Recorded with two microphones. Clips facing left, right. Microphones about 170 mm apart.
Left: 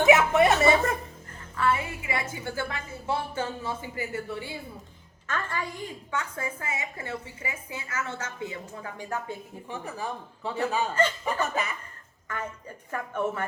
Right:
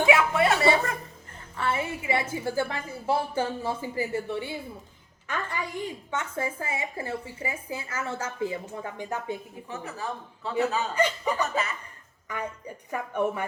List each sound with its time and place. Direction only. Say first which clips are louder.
0.0 s chuckle: left 3 dB; 20° left (ahead or behind)
1.5 s music: left 2 dB; 25° right (ahead or behind)
2.3 s speech: right 5 dB; 30° right (ahead or behind)
9.6 s a man's voice: left 1 dB; 15° left (ahead or behind)
10.9 s speech: right 1 dB; 15° right (ahead or behind)